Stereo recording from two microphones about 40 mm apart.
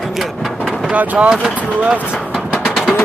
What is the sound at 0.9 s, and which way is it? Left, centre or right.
Speech, right.